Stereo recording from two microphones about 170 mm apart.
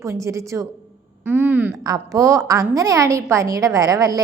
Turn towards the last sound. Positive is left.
turn(degrees=-20)  # may be behind; listen again after turning